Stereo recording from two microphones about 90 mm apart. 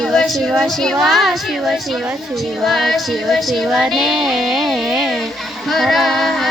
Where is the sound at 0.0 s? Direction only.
5° left (ahead or behind).